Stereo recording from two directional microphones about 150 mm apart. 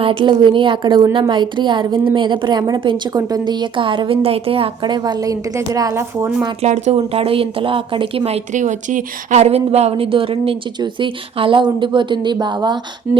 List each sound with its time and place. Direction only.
0.0 s a woman's voice: 35° right (ahead or behind); by 6.3 s 15° right (ahead or behind)
6.6 s speech: 50° right (ahead or behind); by 12.8 s 30° right (ahead or behind)